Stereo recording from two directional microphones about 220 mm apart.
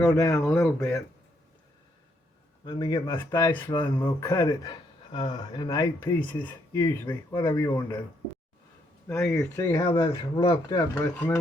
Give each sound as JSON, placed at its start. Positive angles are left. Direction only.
{"t": 0.1, "sound": "speech", "side_deg": 15}
{"t": 2.6, "sound": "speech", "side_deg": 15}
{"t": 9.0, "sound": "speech", "side_deg": 5}
{"t": 9.6, "sound": "speech", "side_deg": 20}